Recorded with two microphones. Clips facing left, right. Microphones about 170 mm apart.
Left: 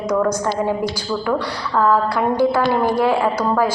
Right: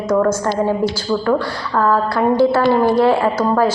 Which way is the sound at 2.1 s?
15° left (ahead or behind).